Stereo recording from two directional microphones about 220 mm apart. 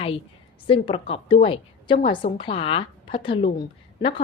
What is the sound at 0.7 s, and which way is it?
A woman's voice, 25° left (ahead or behind).